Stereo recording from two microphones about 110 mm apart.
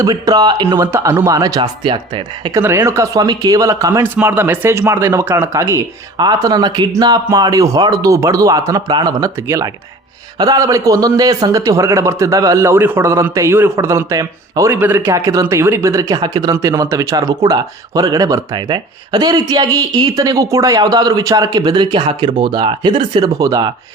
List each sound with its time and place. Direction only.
0.0 s speech: 35° right (ahead or behind)
0.9 s a man's voice: 25° right (ahead or behind)
1.8 s speech: 50° right (ahead or behind)
2.5 s a man's voice: 25° right (ahead or behind)
4.0 s a man's voice: 15° right (ahead or behind)
6.1 s a man's voice: 40° right (ahead or behind)
14.7 s a man's voice: 20° right (ahead or behind); by 23.7 s 35° right (ahead or behind)